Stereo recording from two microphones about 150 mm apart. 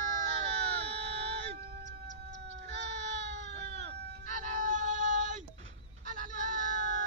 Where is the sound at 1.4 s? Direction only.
90° right.